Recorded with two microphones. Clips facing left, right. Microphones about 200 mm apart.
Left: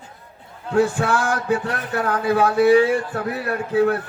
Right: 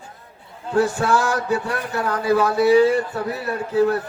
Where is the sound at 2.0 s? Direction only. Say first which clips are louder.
Even; 55° left (ahead or behind).